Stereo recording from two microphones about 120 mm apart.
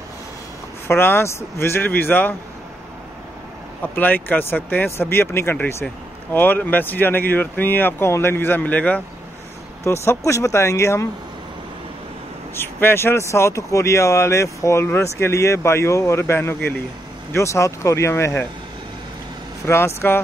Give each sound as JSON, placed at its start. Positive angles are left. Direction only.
{"t": 0.8, "sound": "speech", "side_deg": 20}
{"t": 3.8, "sound": "speech", "side_deg": 15}
{"t": 9.8, "sound": "speech", "side_deg": 25}
{"t": 12.5, "sound": "speech", "side_deg": 20}
{"t": 19.6, "sound": "speech", "side_deg": 20}